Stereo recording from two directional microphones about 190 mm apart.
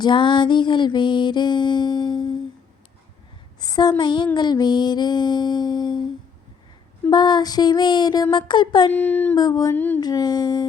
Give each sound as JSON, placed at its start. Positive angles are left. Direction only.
{"t": 0.0, "sound": "music", "side_deg": 25}
{"t": 3.6, "sound": "a woman's voice", "side_deg": 20}
{"t": 4.4, "sound": "music", "side_deg": 20}
{"t": 7.1, "sound": "music", "side_deg": 25}
{"t": 8.9, "sound": "a sound", "side_deg": 10}
{"t": 9.3, "sound": "music", "side_deg": 20}
{"t": 10.0, "sound": "music", "side_deg": 20}